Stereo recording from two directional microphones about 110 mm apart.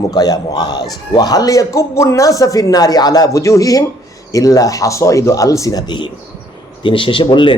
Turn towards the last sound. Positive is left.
turn(degrees=45)  # may be behind; listen again after turning